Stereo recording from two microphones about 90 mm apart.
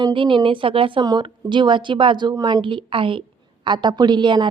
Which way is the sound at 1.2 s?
60° right (ahead or behind).